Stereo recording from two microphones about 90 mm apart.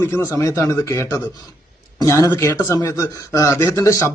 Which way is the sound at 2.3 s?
35° left (ahead or behind).